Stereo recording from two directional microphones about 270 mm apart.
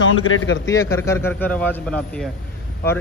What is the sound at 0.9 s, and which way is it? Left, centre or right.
A man's voice, centre.